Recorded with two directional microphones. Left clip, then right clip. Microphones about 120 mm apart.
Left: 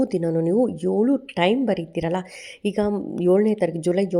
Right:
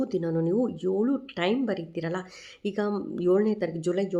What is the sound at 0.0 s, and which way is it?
Speech, 40° left (ahead or behind).